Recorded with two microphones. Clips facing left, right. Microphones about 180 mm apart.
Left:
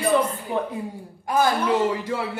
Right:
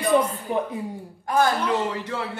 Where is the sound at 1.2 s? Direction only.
10° left (ahead or behind).